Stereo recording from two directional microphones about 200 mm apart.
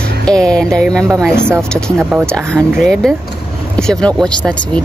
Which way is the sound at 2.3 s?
5° left (ahead or behind).